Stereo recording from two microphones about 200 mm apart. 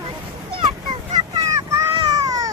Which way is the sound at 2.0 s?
15° right (ahead or behind).